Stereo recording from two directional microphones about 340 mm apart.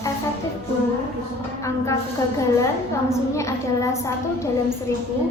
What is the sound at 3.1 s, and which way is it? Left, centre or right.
A woman's voice, centre.